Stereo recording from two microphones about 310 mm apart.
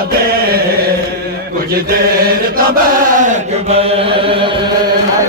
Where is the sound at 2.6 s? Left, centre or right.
Right.